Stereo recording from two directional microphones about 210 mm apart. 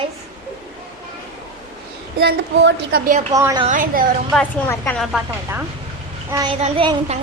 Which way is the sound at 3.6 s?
40° right (ahead or behind).